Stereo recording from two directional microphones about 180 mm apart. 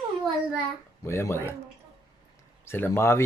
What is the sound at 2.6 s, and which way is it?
Speech, 15° left (ahead or behind).